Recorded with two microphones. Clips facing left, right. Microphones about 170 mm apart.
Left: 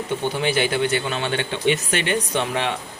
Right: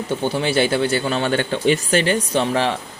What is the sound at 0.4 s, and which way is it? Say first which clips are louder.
Speech: right 3 dB; 35° right (ahead or behind).